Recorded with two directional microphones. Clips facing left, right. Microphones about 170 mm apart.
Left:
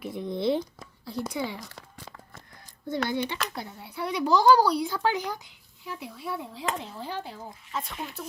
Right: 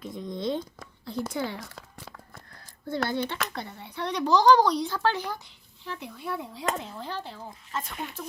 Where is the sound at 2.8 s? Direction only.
15° left (ahead or behind).